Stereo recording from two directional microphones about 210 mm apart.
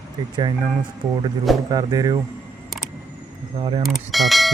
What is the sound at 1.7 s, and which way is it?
Speech, 15° right (ahead or behind).